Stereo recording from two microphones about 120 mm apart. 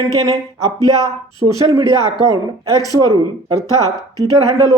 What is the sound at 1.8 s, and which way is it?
Speech, 35° left (ahead or behind).